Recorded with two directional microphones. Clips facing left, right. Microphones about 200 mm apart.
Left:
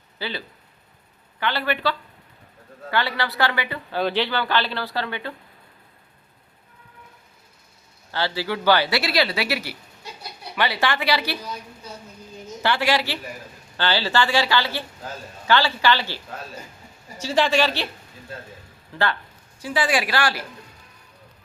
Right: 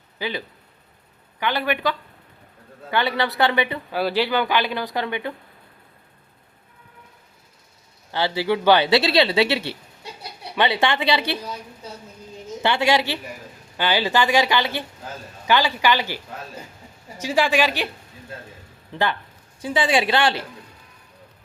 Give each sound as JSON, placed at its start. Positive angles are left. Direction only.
{"t": 0.2, "sound": "speech", "side_deg": -15}
{"t": 3.9, "sound": "speech", "side_deg": -10}
{"t": 8.1, "sound": "speech", "side_deg": -20}
{"t": 12.6, "sound": "speech", "side_deg": -20}
{"t": 18.9, "sound": "speech", "side_deg": -20}